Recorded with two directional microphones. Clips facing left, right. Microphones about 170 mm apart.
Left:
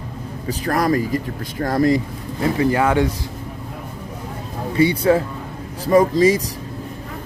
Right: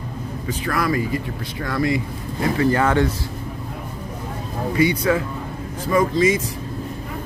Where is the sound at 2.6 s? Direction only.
10° left (ahead or behind).